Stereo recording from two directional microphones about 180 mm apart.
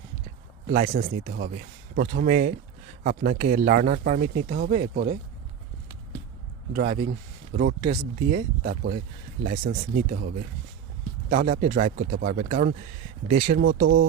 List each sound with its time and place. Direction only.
0.7 s speech: 50° right (ahead or behind)
6.7 s speech: 50° right (ahead or behind)
13.5 s speech: 65° right (ahead or behind)